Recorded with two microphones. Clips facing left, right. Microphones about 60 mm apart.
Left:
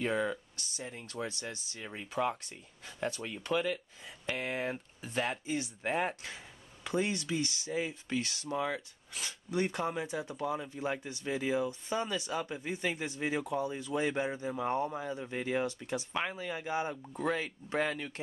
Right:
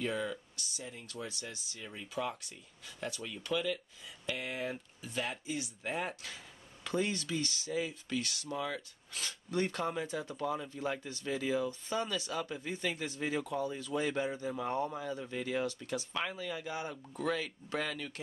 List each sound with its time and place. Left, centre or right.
0.0 s speech: left
6.2 s speech: centre